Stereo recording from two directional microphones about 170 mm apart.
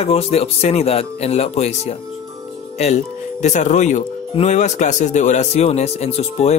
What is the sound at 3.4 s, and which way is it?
Speech, 45° left (ahead or behind).